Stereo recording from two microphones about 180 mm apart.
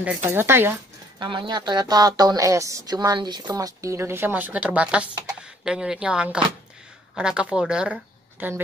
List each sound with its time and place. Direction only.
0.3 s a woman's voice: 10° right (ahead or behind)
1.2 s a woman's voice: 25° right (ahead or behind); by 8.5 s 10° right (ahead or behind)